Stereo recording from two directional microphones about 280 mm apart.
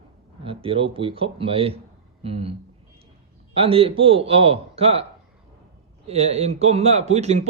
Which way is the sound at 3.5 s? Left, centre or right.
Centre.